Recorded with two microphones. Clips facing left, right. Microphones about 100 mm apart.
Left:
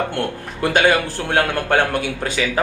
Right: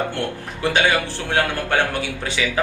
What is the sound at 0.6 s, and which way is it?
A man's voice, 45° left (ahead or behind).